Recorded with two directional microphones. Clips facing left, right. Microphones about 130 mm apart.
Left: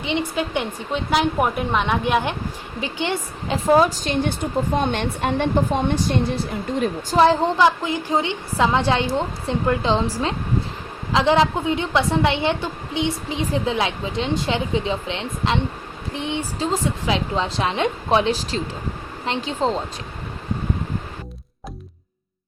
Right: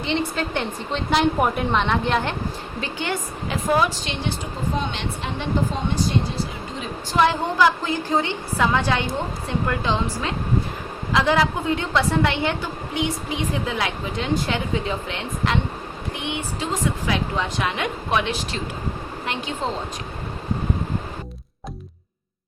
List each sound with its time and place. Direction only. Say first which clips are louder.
0.0 s a woman's voice: left 1 dB; 15° left (ahead or behind)
2.8 s a woman's voice: left 3 dB; 25° left (ahead or behind)
3.8 s a woman's voice: left 5 dB; 45° left (ahead or behind)
7.2 s speech: left 3 dB; 30° left (ahead or behind)
7.9 s a woman's voice: left 1 dB; 20° left (ahead or behind)
16.1 s a woman's voice: left 4 dB; 35° left (ahead or behind)